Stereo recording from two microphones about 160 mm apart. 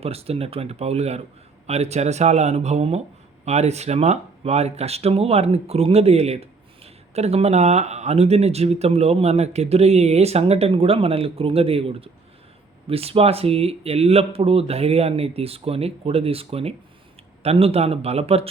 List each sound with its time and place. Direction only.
0.0 s speech: 40° right (ahead or behind)